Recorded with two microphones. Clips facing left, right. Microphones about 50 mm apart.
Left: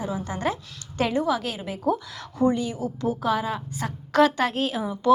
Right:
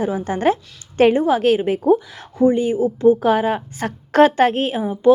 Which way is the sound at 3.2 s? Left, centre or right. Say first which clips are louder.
Right 8 dB; right.